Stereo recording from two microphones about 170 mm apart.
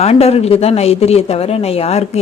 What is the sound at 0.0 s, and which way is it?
A woman's voice, 35° left (ahead or behind).